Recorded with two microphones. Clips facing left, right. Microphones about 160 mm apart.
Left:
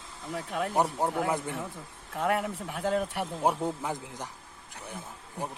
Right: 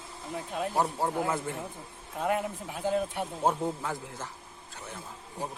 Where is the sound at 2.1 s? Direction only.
75° left (ahead or behind).